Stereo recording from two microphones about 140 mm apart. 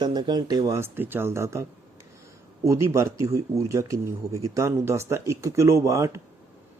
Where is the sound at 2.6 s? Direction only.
20° right (ahead or behind).